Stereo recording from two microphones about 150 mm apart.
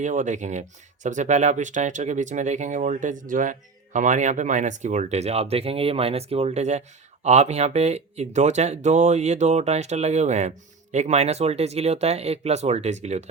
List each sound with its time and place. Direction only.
0.0 s speech: 55° right (ahead or behind)